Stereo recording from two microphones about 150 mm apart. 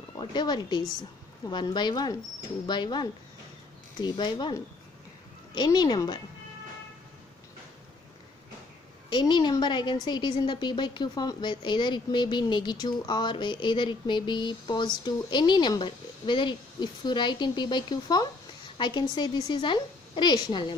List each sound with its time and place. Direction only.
0.2 s a woman's voice: 30° left (ahead or behind)
9.1 s a woman's voice: 30° left (ahead or behind)